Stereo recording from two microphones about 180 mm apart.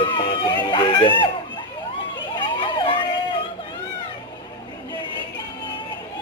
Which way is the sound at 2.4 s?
25° left (ahead or behind).